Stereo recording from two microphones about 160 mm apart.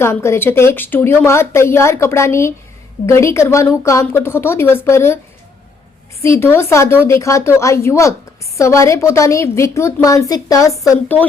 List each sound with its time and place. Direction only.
0.0 s a woman's voice: 15° left (ahead or behind)
6.2 s a woman's voice: 15° left (ahead or behind)
10.8 s a woman's voice: 10° left (ahead or behind)